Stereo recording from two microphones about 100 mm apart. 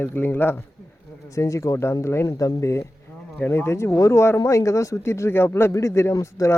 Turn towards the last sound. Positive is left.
turn(degrees=30)  # may be behind; listen again after turning